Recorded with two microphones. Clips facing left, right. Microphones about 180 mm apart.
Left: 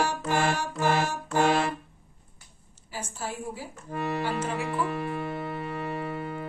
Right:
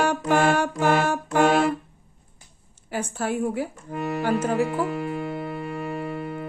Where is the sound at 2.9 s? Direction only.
60° right (ahead or behind).